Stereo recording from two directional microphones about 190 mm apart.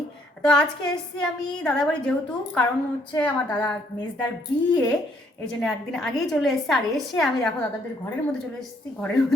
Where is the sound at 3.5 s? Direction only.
20° left (ahead or behind).